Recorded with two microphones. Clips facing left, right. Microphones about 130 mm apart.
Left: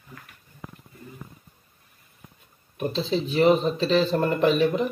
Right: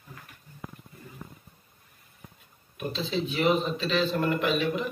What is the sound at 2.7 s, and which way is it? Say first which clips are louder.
A man's voice: left 5 dB; 30° left (ahead or behind).